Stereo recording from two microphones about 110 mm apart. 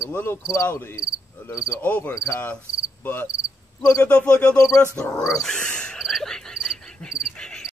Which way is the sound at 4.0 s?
10° left (ahead or behind).